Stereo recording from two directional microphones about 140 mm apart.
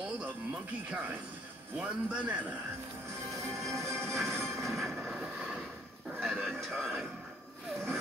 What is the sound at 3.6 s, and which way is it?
Music, 20° right (ahead or behind).